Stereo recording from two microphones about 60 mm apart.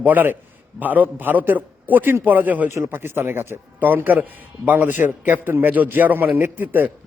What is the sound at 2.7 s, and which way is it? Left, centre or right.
A man's voice, right.